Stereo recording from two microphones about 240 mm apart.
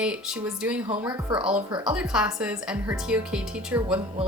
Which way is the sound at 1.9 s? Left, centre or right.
Centre.